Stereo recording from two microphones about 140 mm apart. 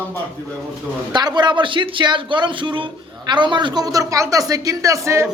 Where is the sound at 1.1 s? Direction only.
30° right (ahead or behind).